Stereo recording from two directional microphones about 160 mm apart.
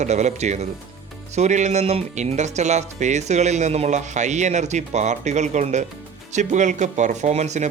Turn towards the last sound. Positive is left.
turn(degrees=-45)  # may be behind; listen again after turning